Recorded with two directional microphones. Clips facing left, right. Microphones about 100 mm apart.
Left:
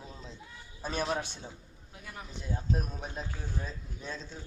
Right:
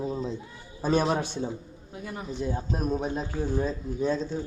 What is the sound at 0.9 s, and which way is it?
A man's voice, 20° right (ahead or behind).